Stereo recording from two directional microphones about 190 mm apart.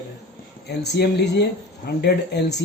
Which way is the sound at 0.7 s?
60° left (ahead or behind).